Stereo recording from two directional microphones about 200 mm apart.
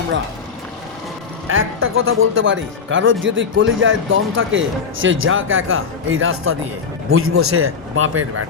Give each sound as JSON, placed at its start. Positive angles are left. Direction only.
{"t": 1.5, "sound": "a man's voice", "side_deg": -85}